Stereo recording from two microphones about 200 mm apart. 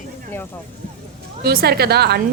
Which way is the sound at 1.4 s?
50° right (ahead or behind).